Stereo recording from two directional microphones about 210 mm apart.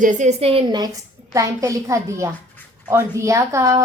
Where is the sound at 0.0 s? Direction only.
35° right (ahead or behind).